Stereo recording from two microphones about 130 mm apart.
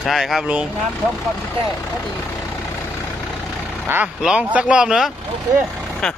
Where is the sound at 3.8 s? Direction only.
15° right (ahead or behind).